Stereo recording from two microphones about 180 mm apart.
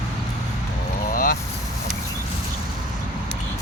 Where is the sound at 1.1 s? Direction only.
50° left (ahead or behind).